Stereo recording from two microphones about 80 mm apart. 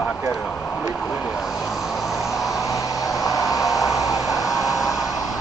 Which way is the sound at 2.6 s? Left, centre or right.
Left.